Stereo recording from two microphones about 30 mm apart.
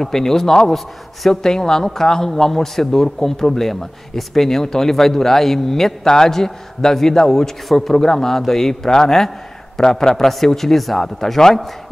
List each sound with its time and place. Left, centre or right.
0.0 s a man's voice: centre
0.7 s a man's voice: centre
1.3 s a man's voice: centre